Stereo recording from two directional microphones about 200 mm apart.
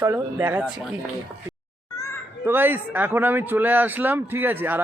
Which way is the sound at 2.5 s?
10° right (ahead or behind).